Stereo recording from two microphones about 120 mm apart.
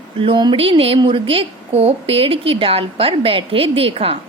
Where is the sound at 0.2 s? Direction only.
45° right (ahead or behind).